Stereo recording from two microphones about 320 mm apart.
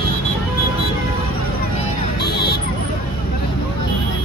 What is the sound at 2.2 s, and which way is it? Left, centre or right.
Vehicle, left.